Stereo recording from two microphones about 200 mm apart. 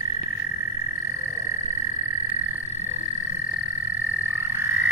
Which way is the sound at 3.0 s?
40° left (ahead or behind).